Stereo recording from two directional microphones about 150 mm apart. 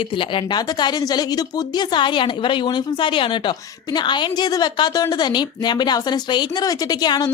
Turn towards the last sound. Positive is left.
turn(degrees=25)  # may be behind; listen again after turning